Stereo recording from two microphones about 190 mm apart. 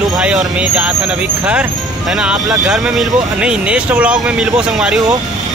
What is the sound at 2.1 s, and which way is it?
Speech, 5° right (ahead or behind).